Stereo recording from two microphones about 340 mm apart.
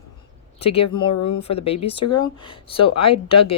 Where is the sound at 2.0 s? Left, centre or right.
Left.